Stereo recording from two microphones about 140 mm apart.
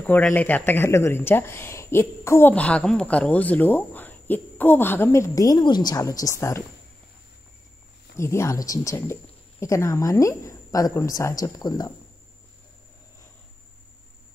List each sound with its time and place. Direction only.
0.0 s speech: 10° left (ahead or behind)
8.2 s speech: 20° left (ahead or behind)